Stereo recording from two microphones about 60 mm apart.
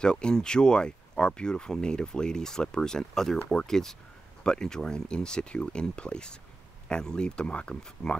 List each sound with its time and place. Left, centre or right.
0.0 s speech: centre